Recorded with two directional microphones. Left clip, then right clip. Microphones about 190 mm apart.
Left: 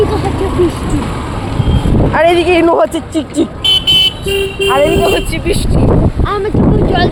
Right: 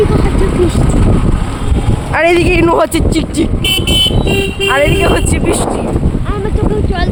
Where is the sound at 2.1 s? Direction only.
35° right (ahead or behind).